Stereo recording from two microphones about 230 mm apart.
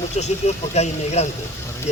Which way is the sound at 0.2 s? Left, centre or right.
Left.